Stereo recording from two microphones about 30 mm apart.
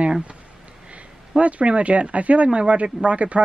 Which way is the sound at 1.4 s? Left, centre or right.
Right.